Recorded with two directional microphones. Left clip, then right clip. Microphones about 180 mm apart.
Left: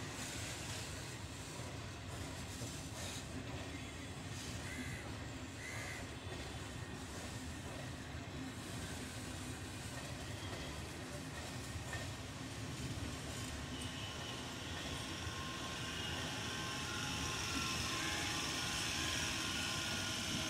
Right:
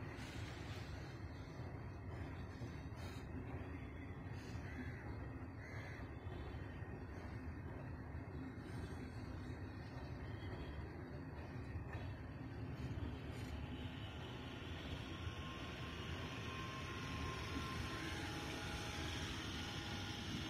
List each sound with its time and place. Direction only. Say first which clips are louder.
16.4 s vehicle: left 6 dB; 55° left (ahead or behind)